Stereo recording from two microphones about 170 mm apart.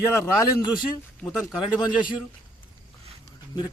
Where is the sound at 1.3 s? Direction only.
Centre (ahead or behind).